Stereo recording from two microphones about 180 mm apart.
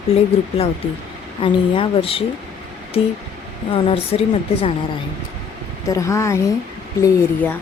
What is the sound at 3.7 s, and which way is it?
Speech, 30° left (ahead or behind).